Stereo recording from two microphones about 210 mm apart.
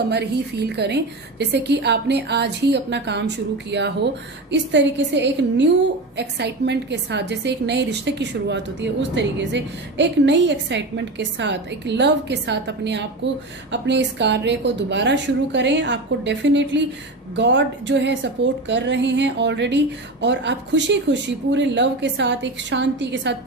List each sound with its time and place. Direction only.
0.1 s a woman's voice: 55° right (ahead or behind)